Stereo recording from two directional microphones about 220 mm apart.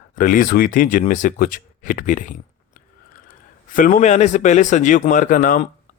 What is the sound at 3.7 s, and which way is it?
Speech, 35° left (ahead or behind).